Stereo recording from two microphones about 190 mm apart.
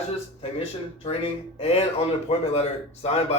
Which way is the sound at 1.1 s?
30° left (ahead or behind).